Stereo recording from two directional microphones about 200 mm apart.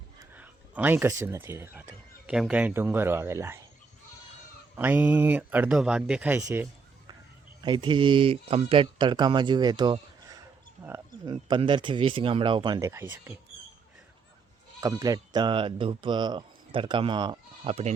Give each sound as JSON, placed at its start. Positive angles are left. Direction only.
{"t": 0.3, "sound": "speech", "side_deg": -10}
{"t": 4.8, "sound": "speech", "side_deg": -10}
{"t": 7.6, "sound": "speech", "side_deg": -25}
{"t": 11.4, "sound": "speech", "side_deg": -25}
{"t": 14.8, "sound": "speech", "side_deg": -15}